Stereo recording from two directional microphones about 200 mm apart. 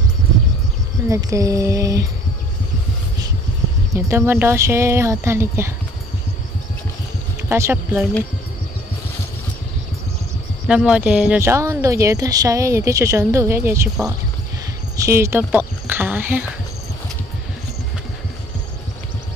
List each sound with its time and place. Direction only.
1.0 s speech: 15° right (ahead or behind)
3.9 s speech: 15° right (ahead or behind)
7.4 s speech: 10° right (ahead or behind)
10.7 s speech: 5° right (ahead or behind)
15.0 s speech: 15° right (ahead or behind)